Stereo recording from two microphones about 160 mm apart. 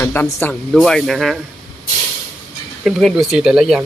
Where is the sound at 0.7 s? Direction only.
Centre (ahead or behind).